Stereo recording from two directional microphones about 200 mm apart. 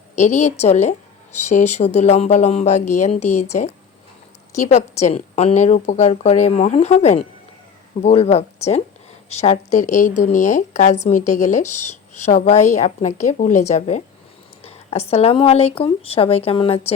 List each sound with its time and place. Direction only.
0.2 s a woman's voice: 35° left (ahead or behind)